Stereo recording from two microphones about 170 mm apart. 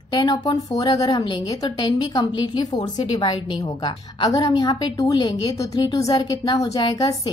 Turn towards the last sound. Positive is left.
turn(degrees=20)  # may be behind; listen again after turning